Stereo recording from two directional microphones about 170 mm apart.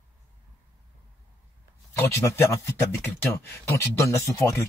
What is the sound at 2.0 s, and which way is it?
Speech, 20° left (ahead or behind).